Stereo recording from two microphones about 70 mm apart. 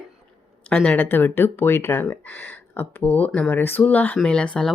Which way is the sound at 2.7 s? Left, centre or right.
Left.